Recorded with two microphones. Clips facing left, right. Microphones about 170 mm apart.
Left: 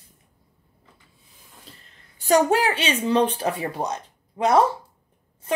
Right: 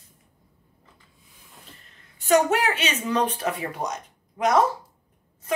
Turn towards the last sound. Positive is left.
turn(degrees=30)  # may be behind; listen again after turning